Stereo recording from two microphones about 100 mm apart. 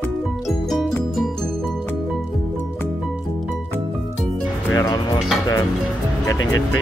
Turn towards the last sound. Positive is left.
turn(degrees=35)  # may be behind; listen again after turning